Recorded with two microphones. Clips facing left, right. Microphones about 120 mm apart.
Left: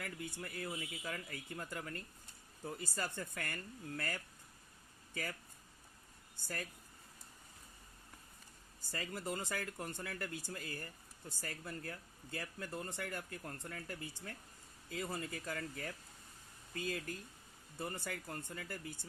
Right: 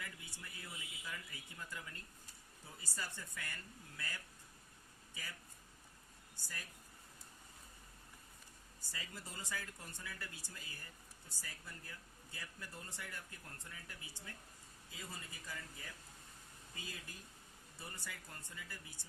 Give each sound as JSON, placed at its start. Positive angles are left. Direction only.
{"t": 0.0, "sound": "speech", "side_deg": 60}
{"t": 8.9, "sound": "speech", "side_deg": 55}